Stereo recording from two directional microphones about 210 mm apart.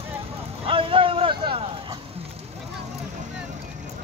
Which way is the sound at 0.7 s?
25° right (ahead or behind).